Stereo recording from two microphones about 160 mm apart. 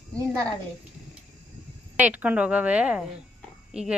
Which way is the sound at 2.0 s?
10° right (ahead or behind).